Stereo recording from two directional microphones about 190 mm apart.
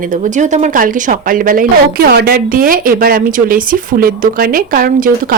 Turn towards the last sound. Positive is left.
turn(degrees=-45)  # may be behind; listen again after turning